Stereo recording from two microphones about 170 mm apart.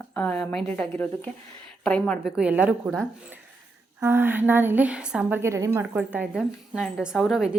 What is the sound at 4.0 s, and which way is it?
A woman's voice, 10° right (ahead or behind).